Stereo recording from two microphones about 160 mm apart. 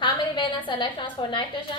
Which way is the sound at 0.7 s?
30° left (ahead or behind).